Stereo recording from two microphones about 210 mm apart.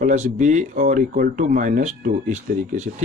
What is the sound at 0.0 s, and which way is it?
Speech, 35° right (ahead or behind).